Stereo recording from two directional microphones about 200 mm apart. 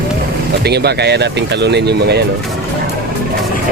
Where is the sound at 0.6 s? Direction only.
55° right (ahead or behind).